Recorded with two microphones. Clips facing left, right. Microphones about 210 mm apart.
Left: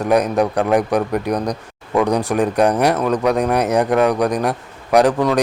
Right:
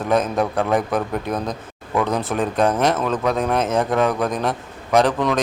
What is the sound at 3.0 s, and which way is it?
A man's voice, 15° left (ahead or behind).